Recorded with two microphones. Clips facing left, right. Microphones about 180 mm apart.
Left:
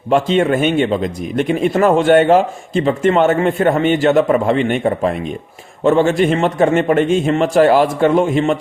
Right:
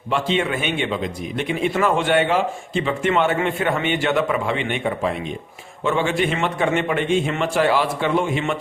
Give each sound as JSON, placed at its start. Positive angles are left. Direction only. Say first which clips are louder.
{"t": 0.1, "sound": "speech", "louder": "left 8 dB", "side_deg": 45}